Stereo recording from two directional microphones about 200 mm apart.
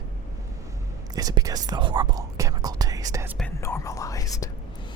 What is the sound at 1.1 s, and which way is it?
Speech, 20° right (ahead or behind).